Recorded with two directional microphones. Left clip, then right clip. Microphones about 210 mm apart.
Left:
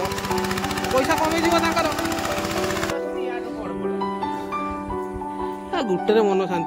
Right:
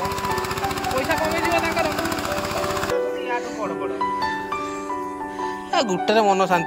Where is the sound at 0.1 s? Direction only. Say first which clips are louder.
Even; 5° left (ahead or behind).